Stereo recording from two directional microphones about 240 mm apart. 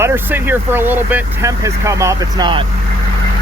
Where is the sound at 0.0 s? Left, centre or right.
Centre.